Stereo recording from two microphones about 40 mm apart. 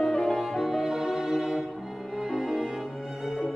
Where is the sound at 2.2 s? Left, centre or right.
Centre.